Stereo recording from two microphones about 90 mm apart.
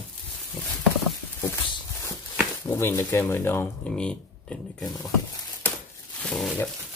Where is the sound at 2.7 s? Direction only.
30° left (ahead or behind).